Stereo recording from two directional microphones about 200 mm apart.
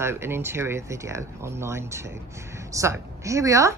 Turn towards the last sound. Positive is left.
turn(degrees=-15)  # may be behind; listen again after turning